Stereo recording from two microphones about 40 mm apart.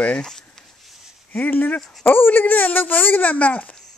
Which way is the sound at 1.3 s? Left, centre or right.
Left.